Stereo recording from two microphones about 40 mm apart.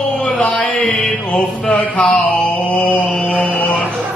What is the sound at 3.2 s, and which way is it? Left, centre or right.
Mantra, left.